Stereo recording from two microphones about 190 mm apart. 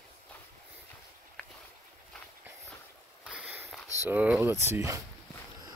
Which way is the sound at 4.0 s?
10° right (ahead or behind).